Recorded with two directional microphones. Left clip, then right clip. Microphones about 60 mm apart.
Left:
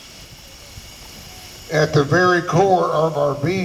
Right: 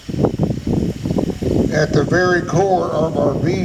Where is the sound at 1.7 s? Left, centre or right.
Right.